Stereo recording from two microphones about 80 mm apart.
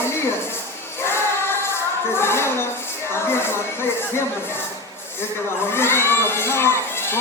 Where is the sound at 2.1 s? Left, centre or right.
Left.